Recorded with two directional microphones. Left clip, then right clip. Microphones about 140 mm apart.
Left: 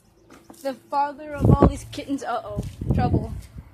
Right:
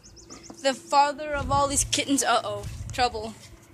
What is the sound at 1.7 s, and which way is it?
Speech, 25° right (ahead or behind).